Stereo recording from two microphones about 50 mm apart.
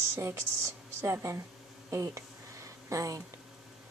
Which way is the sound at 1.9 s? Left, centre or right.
Right.